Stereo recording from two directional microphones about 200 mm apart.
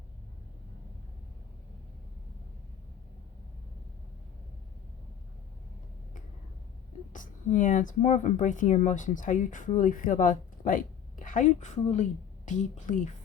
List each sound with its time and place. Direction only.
7.1 s speech: 40° left (ahead or behind)